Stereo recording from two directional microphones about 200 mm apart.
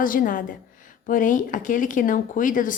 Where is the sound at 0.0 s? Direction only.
45° left (ahead or behind).